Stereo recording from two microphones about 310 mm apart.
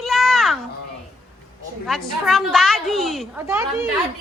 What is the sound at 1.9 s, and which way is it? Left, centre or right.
A woman's voice, centre.